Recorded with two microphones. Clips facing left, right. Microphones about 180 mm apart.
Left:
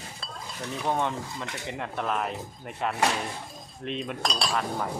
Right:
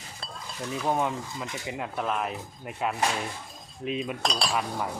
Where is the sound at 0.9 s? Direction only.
5° right (ahead or behind).